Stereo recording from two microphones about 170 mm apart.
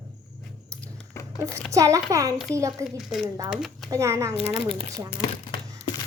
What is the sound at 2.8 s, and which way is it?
A woman's voice, centre (ahead or behind).